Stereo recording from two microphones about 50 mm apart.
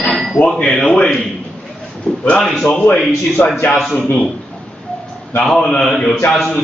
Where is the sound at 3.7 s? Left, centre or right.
Centre.